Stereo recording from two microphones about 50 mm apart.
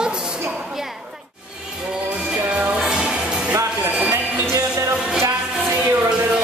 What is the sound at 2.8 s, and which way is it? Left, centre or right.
Music, centre.